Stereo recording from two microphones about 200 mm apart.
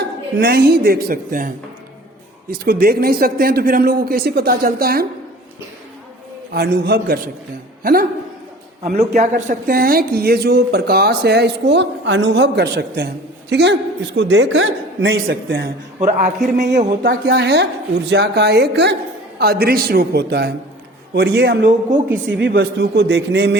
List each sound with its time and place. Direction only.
0.3 s a man's voice: 50° right (ahead or behind)
6.5 s a man's voice: 50° right (ahead or behind)
9.1 s a man's voice: 45° right (ahead or behind); by 15.7 s 70° right (ahead or behind)
16.0 s speech: 40° right (ahead or behind)
17.1 s a man's voice: 55° right (ahead or behind)